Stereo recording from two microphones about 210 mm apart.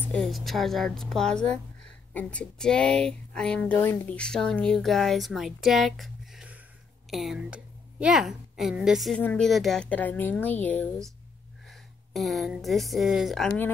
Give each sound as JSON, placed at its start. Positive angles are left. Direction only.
{"t": 0.1, "sound": "a woman's voice", "side_deg": 0}